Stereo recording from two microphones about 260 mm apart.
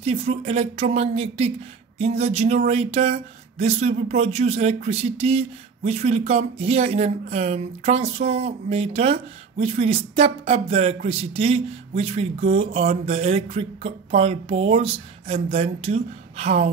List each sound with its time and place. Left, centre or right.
0.0 s speech: right